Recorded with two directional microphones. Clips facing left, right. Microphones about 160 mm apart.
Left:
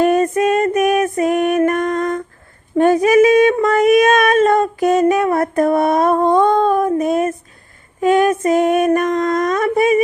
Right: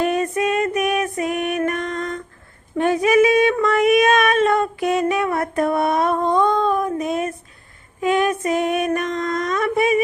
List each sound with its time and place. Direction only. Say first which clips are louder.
0.0 s female singing: left 6 dB; 45° left (ahead or behind)
2.7 s speech: left 5 dB; 40° left (ahead or behind)
3.6 s child singing: left 4 dB; 45° left (ahead or behind)
8.0 s female singing: left 5 dB; 45° left (ahead or behind)